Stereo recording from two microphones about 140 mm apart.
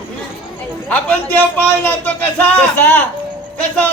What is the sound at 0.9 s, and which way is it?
Music, 15° left (ahead or behind).